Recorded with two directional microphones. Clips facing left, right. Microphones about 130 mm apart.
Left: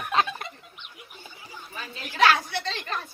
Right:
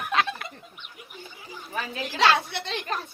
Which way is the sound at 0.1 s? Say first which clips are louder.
Left 1 dB; 35° left (ahead or behind).